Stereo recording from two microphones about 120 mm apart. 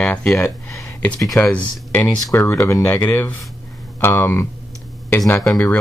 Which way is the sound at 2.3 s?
25° left (ahead or behind).